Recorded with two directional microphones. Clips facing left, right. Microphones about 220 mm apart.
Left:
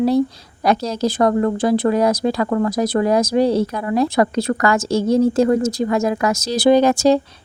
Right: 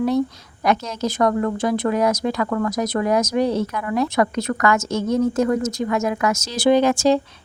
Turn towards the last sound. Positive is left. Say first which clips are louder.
# left 3 dB
turn(degrees=40)  # may be behind; listen again after turning